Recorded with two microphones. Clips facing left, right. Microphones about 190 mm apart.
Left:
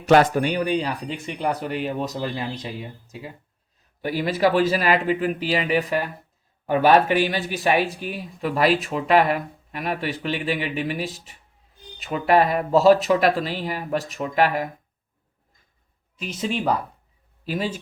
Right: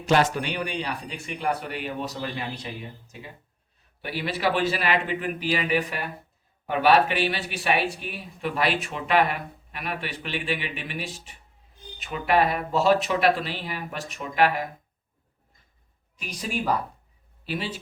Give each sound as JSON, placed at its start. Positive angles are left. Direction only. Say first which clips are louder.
{"t": 0.3, "sound": "speech", "louder": "left 7 dB", "side_deg": 40}
{"t": 4.0, "sound": "speech", "louder": "left 6 dB", "side_deg": 40}
{"t": 16.1, "sound": "speech", "louder": "left 4 dB", "side_deg": 25}
{"t": 17.4, "sound": "a man's voice", "louder": "left 5 dB", "side_deg": 40}